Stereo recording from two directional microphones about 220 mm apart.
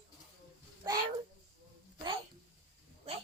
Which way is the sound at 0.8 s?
20° right (ahead or behind).